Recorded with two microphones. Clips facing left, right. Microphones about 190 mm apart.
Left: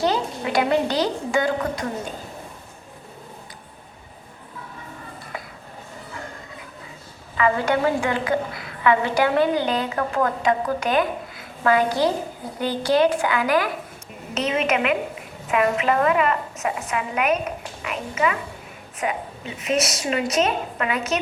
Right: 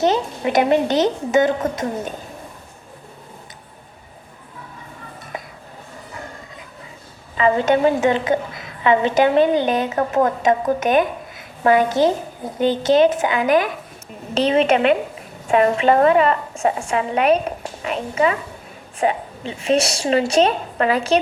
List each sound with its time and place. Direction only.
0.0 s a woman's voice: 20° right (ahead or behind)
7.3 s a woman's voice: 20° right (ahead or behind)
14.3 s a woman's voice: 30° right (ahead or behind)